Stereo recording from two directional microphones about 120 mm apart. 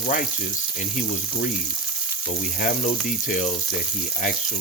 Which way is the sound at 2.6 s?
90° left.